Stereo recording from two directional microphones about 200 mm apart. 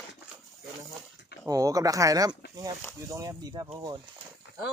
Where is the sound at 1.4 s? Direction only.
15° right (ahead or behind).